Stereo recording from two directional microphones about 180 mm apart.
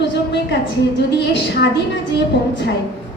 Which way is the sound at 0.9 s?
70° left (ahead or behind).